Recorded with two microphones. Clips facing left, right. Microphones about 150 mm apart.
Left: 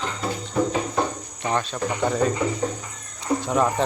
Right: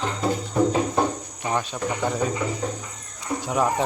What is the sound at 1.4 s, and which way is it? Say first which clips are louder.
Speech: left 1 dB; 10° right (ahead or behind).